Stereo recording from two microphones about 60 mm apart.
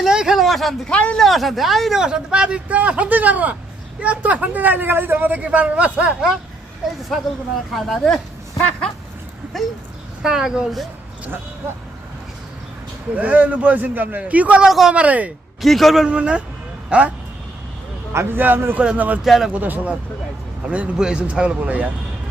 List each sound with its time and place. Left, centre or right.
0.0 s a sound: centre
0.9 s speech: left
1.1 s speech: centre; by 6.1 s right
7.1 s a man's voice: centre
9.5 s a man's voice: centre
13.1 s speech: right
14.6 s speech: centre
14.9 s speech: right
15.6 s a man's voice: centre
16.0 s speech: centre
18.1 s a man's voice: right
19.2 s a man's voice: centre
19.5 s speech: right